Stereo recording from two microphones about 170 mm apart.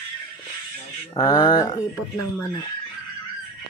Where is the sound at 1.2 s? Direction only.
20° left (ahead or behind).